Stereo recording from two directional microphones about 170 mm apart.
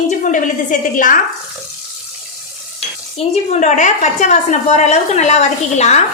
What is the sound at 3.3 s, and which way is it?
A woman's voice, 45° left (ahead or behind).